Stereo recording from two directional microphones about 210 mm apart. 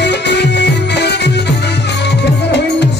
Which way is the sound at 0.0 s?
55° left (ahead or behind).